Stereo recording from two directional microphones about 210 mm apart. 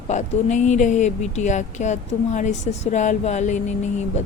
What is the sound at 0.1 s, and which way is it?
Speech, 35° left (ahead or behind).